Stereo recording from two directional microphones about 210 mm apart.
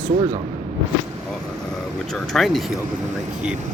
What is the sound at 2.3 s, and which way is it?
Speech, centre (ahead or behind).